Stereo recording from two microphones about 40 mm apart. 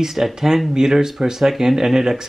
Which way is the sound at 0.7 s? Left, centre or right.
Centre.